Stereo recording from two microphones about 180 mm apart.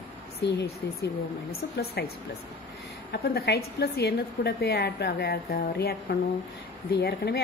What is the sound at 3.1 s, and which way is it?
A woman's voice, 60° left (ahead or behind).